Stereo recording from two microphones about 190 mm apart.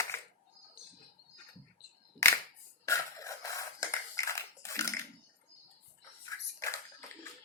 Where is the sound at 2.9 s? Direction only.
15° left (ahead or behind).